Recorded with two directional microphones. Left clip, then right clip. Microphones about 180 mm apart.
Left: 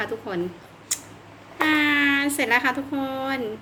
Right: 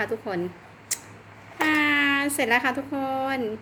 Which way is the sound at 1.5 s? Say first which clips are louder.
Left 1 dB; 25° right (ahead or behind).